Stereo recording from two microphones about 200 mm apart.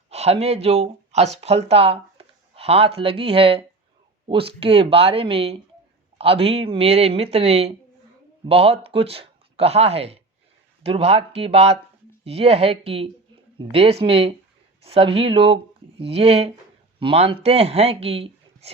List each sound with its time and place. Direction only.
0.1 s speech: 30° right (ahead or behind)